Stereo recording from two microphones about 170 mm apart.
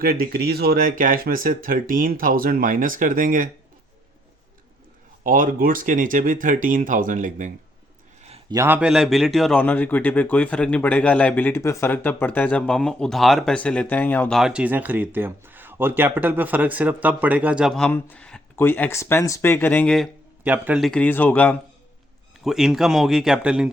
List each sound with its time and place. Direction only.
0.0 s speech: 60° right (ahead or behind)
5.2 s speech: 55° right (ahead or behind)
8.4 s a man's voice: 15° right (ahead or behind); by 20.1 s 5° left (ahead or behind)
20.4 s a man's voice: 10° right (ahead or behind)
20.9 s speech: 10° left (ahead or behind)
22.4 s a man's voice: centre (ahead or behind)